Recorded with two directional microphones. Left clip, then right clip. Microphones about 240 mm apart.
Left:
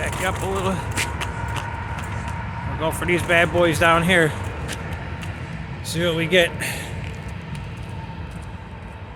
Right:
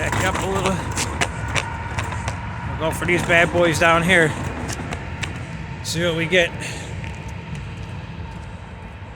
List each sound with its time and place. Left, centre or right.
0.0 s speech: centre
2.8 s speech: centre
5.9 s speech: centre
6.6 s a sound: left